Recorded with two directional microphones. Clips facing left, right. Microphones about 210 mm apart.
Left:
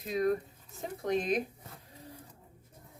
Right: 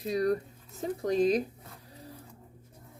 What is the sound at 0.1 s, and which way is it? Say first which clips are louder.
Speech: right 2 dB; 35° right (ahead or behind).